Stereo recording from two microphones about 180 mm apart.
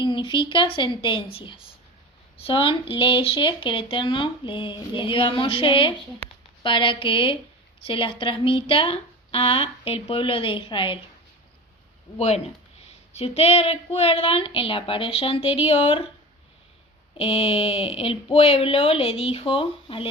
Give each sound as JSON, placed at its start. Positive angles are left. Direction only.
{"t": 0.0, "sound": "speech", "side_deg": 25}
{"t": 12.1, "sound": "a woman's voice", "side_deg": 35}
{"t": 17.2, "sound": "a woman's voice", "side_deg": 35}